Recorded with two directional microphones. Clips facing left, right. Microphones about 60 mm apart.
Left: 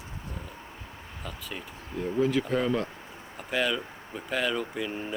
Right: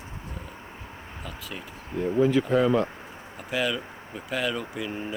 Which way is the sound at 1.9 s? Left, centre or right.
Right.